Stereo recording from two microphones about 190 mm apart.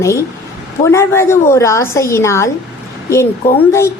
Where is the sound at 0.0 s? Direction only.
15° left (ahead or behind).